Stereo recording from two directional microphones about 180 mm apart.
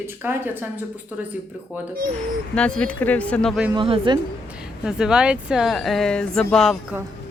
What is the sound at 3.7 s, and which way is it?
Speech, 25° right (ahead or behind).